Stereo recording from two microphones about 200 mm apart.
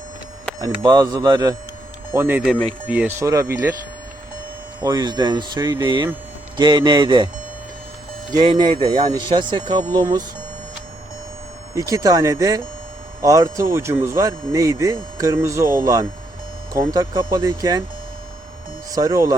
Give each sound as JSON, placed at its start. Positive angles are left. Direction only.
{"t": 0.9, "sound": "speech", "side_deg": -20}
{"t": 4.8, "sound": "speech", "side_deg": -20}
{"t": 8.4, "sound": "speech", "side_deg": -20}
{"t": 11.7, "sound": "speech", "side_deg": -15}
{"t": 18.9, "sound": "speech", "side_deg": -15}